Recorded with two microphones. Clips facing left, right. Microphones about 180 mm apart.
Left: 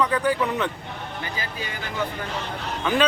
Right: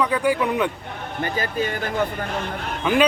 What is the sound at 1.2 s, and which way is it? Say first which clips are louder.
Speech: right 12 dB; 50° right (ahead or behind).